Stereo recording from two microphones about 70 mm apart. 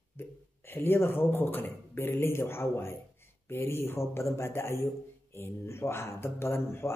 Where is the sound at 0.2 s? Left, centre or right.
Left.